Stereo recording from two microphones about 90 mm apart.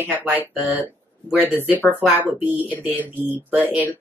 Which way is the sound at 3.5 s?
15° right (ahead or behind).